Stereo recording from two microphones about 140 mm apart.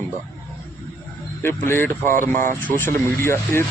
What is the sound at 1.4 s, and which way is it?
A man's voice, 15° left (ahead or behind).